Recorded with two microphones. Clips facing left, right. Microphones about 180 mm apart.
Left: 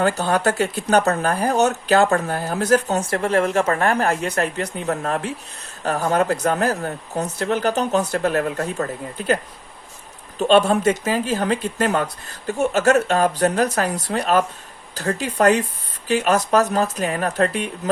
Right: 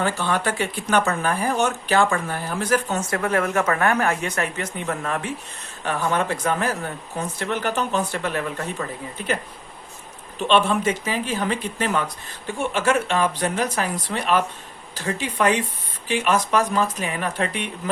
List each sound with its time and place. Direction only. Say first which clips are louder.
0.0 s speech: left 4 dB; 40° left (ahead or behind)